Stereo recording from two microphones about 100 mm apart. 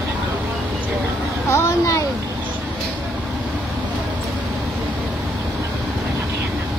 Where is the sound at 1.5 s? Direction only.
30° left (ahead or behind).